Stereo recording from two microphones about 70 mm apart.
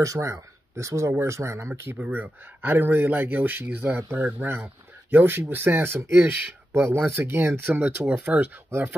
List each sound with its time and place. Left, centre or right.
0.0 s speech: right
2.0 s speech: right
8.6 s speech: right